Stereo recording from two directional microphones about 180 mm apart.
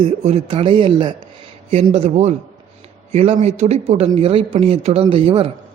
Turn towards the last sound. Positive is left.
turn(degrees=-30)  # may be behind; listen again after turning